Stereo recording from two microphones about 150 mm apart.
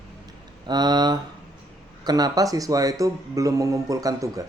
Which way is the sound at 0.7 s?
30° right (ahead or behind).